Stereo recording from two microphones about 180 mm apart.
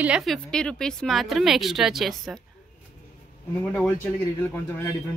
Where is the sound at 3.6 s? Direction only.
10° left (ahead or behind).